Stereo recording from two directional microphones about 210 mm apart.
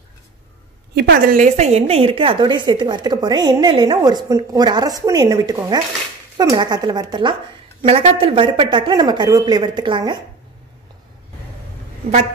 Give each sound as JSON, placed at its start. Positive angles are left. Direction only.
{"t": 0.9, "sound": "a woman's voice", "side_deg": -45}